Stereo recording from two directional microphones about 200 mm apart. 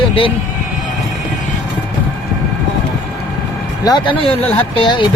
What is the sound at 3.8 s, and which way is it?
Speech, 20° left (ahead or behind).